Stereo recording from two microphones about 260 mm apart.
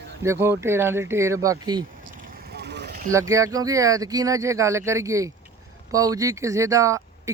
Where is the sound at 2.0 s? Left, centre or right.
Right.